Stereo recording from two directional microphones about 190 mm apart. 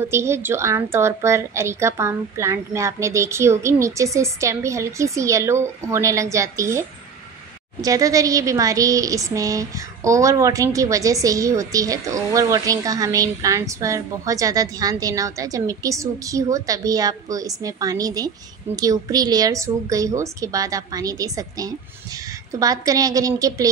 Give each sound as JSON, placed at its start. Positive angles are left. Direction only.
{"t": 0.0, "sound": "a woman's voice", "side_deg": -15}